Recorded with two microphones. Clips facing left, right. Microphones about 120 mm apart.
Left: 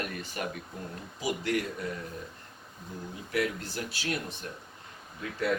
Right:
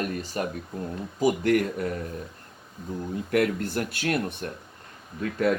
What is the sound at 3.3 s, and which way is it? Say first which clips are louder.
Speech: right 7 dB; 55° right (ahead or behind).